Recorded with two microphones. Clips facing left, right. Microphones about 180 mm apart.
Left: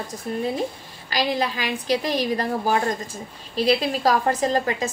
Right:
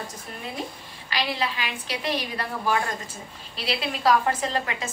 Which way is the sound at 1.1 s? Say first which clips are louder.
Left 5 dB; 40° left (ahead or behind).